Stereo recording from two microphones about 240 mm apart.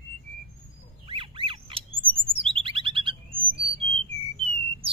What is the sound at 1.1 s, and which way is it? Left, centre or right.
Bird, right.